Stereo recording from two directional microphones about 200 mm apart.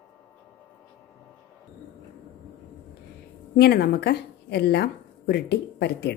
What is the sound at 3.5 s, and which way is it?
Speech, 50° left (ahead or behind).